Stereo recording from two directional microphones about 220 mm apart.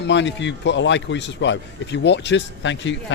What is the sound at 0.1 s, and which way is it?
A man's voice, 55° left (ahead or behind).